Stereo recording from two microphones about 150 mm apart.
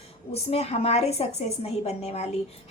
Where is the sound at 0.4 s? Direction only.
45° left (ahead or behind).